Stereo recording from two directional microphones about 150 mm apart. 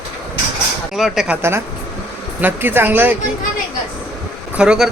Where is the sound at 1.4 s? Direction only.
15° right (ahead or behind).